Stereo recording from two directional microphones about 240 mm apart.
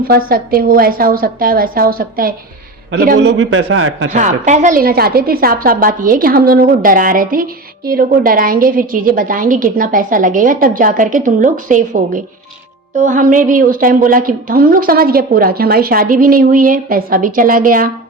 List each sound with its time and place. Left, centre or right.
0.0 s a woman's voice: right
3.3 s a man's voice: right
4.1 s a woman's voice: right